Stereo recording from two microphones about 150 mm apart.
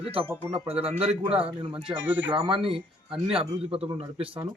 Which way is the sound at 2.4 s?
35° right (ahead or behind).